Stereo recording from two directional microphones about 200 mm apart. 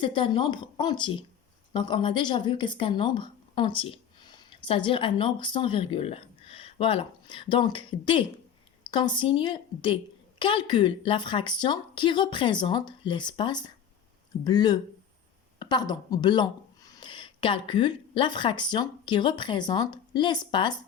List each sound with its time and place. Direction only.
0.0 s a woman's voice: 25° left (ahead or behind)